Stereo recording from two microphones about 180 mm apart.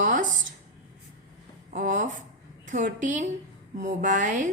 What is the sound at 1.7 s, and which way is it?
A woman's voice, 45° right (ahead or behind).